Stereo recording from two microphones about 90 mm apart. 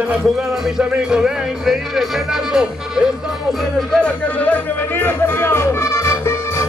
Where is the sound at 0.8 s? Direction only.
10° right (ahead or behind).